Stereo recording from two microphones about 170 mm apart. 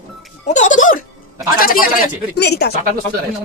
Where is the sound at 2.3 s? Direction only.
75° left (ahead or behind).